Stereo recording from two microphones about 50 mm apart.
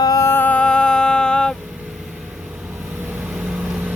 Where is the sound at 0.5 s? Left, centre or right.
Centre.